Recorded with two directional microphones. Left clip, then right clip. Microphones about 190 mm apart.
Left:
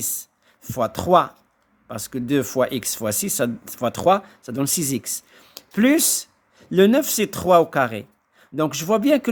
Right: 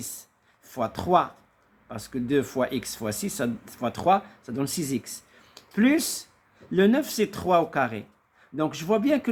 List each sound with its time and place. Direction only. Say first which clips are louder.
0.0 s speech: left 10 dB; 50° left (ahead or behind)